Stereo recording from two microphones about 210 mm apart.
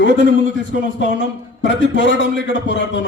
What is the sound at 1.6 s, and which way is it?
A man's voice, 60° left (ahead or behind).